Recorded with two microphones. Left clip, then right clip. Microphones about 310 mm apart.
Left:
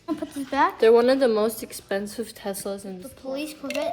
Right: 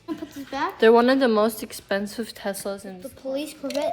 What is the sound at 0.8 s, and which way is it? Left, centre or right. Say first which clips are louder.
Speech: right 2 dB; right.